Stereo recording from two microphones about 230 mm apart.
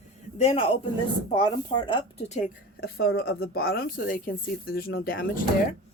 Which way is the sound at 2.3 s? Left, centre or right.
Left.